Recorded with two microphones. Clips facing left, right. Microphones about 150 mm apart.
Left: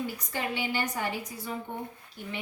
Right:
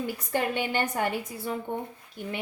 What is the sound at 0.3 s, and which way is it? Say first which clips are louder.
Speech: right 7 dB; 50° right (ahead or behind).